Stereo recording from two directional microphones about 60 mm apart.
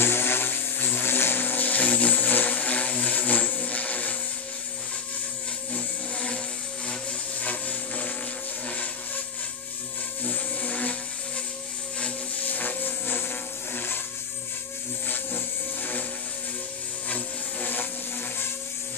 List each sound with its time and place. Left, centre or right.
0.0 s vehicle: left
5.7 s music: left
6.9 s a sound: left
10.2 s blender: left
12.4 s a sound: left
15.0 s music: left
17.1 s vehicle: left